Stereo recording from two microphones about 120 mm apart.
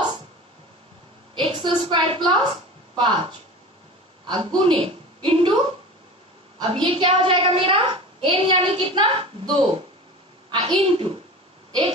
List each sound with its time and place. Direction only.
1.3 s a sound: 45° right (ahead or behind)
1.9 s a woman's voice: 40° right (ahead or behind)
6.6 s a woman's voice: 50° right (ahead or behind)